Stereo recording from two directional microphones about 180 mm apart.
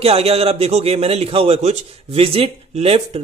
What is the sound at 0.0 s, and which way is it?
Speech, 35° right (ahead or behind).